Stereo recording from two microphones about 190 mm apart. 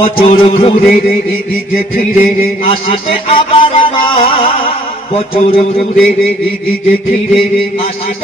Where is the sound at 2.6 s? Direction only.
30° left (ahead or behind).